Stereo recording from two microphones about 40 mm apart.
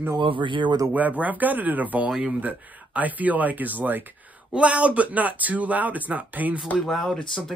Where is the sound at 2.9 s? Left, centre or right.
Right.